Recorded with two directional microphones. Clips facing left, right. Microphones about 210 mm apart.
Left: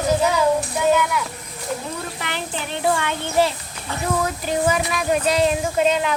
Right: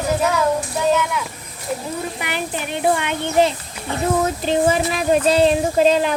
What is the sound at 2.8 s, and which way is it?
A child's voice, 20° right (ahead or behind).